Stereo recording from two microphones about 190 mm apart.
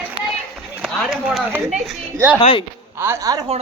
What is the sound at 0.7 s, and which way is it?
Speech, 5° right (ahead or behind).